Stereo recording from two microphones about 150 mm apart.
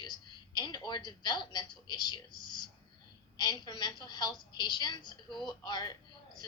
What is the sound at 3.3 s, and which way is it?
A woman's voice, 30° left (ahead or behind).